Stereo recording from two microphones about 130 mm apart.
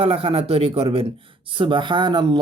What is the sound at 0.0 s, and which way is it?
Speech, 45° right (ahead or behind).